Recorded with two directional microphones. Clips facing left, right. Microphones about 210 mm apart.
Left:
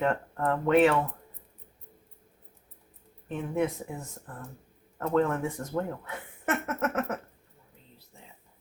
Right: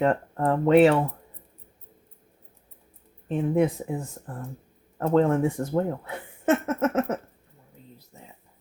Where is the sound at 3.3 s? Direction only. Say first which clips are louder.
Right 6 dB; 30° right (ahead or behind).